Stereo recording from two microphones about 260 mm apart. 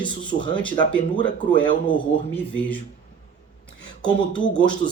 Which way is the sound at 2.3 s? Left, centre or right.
Centre.